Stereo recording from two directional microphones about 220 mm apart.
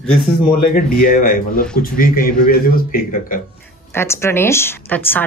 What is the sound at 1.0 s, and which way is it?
Speech, 40° left (ahead or behind).